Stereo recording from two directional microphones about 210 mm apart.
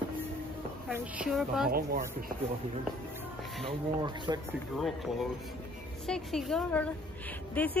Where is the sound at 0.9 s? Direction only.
5° right (ahead or behind).